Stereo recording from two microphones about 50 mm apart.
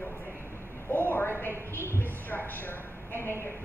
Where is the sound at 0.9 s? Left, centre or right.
Left.